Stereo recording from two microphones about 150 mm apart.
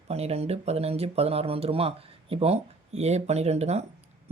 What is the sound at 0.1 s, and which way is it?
Speech, 45° right (ahead or behind).